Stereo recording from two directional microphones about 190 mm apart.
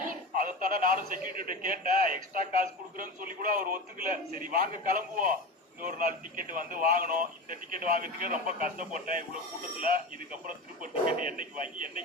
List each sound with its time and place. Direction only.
0.3 s a man's voice: 45° right (ahead or behind)
10.4 s a man's voice: 45° right (ahead or behind)